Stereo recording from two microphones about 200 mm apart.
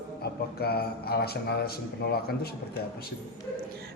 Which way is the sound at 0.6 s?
50° left (ahead or behind).